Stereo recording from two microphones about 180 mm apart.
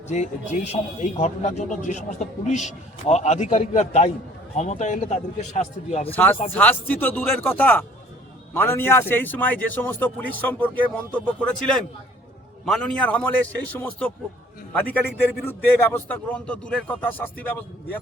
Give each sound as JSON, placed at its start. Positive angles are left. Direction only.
{"t": 0.1, "sound": "a man's voice", "side_deg": 40}
{"t": 6.1, "sound": "a man's voice", "side_deg": 10}
{"t": 12.6, "sound": "a man's voice", "side_deg": 5}